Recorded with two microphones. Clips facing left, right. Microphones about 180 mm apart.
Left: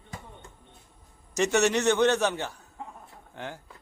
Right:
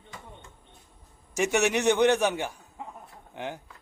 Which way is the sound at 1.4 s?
15° right (ahead or behind).